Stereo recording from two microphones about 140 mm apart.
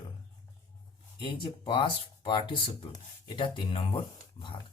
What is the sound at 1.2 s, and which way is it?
Speech, 35° left (ahead or behind).